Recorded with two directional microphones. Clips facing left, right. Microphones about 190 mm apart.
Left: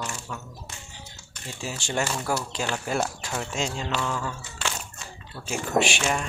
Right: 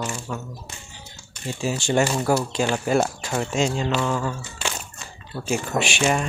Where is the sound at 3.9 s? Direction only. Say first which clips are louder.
Right 5 dB; 25° right (ahead or behind).